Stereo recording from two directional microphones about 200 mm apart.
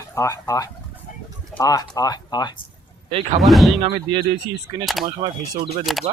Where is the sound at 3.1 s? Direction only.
30° right (ahead or behind).